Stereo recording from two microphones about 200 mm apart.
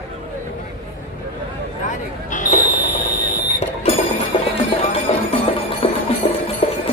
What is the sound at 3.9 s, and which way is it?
Music, 30° left (ahead or behind).